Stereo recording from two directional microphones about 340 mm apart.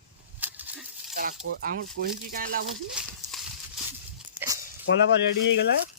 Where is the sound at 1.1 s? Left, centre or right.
Right.